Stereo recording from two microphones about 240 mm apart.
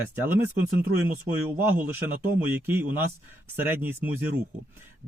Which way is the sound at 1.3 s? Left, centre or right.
Right.